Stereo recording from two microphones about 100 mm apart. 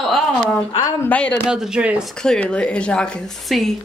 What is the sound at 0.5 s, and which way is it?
Speech, 25° left (ahead or behind).